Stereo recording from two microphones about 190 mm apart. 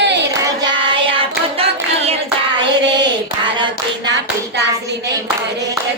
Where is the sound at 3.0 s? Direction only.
25° right (ahead or behind).